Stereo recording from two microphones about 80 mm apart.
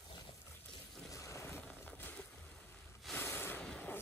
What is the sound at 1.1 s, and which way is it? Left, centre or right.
Boat, left.